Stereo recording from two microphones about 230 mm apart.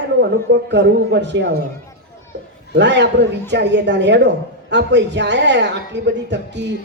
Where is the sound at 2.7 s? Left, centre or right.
Right.